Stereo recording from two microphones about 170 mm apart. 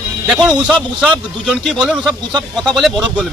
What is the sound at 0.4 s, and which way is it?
A man's voice, 5° right (ahead or behind).